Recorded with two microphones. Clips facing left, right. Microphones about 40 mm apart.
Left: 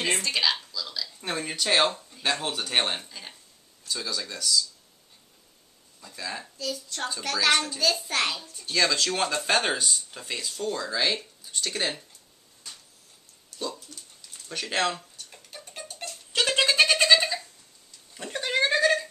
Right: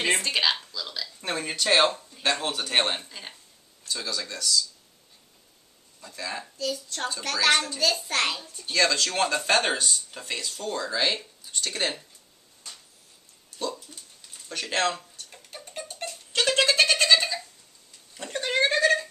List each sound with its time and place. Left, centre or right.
0.0 s speech: centre
1.2 s speech: centre
3.1 s speech: centre
3.8 s speech: centre
5.9 s speech: centre
13.9 s a sound: centre
14.5 s speech: centre
15.1 s tick-tock: centre
16.4 s cat: centre
18.1 s a sound: centre